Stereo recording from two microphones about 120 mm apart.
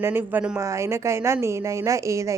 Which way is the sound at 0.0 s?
20° right (ahead or behind).